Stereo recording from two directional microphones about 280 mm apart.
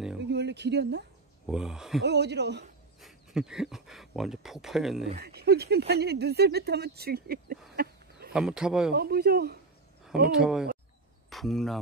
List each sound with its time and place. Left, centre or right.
0.3 s speech: right
1.4 s speech: centre
2.0 s speech: right
3.0 s speech: centre
5.2 s speech: right
8.3 s speech: centre
8.9 s speech: right
10.3 s speech: centre